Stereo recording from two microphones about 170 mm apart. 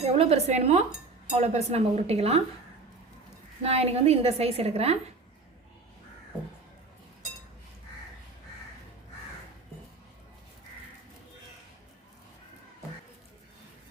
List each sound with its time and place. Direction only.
0.0 s a woman's voice: 40° right (ahead or behind)
3.6 s a woman's voice: 35° right (ahead or behind)